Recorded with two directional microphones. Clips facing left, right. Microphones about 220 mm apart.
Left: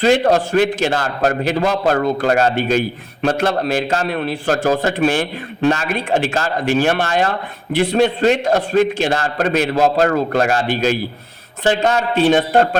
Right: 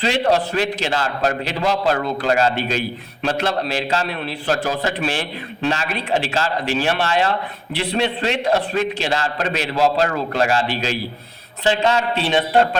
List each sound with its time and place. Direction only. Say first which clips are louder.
0.0 s a man's voice: left 5 dB; 45° left (ahead or behind)